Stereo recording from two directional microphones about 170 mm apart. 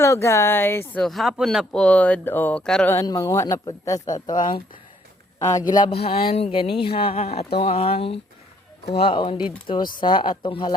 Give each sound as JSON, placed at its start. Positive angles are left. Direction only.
{"t": 0.0, "sound": "speech", "side_deg": 15}
{"t": 1.0, "sound": "speech", "side_deg": 0}
{"t": 2.9, "sound": "speech", "side_deg": 20}